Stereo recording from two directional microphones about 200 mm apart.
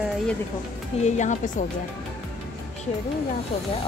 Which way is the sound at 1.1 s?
35° left (ahead or behind).